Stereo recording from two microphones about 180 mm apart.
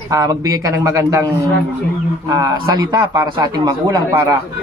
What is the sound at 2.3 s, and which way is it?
A man's voice, 20° right (ahead or behind).